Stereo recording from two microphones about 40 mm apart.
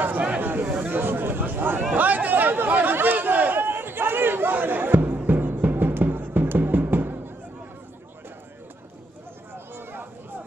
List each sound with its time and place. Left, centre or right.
0.4 s a sound: right
0.7 s chatter: right
0.9 s chatter: right